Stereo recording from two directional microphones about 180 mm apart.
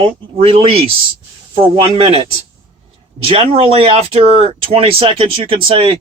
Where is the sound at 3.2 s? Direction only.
30° right (ahead or behind).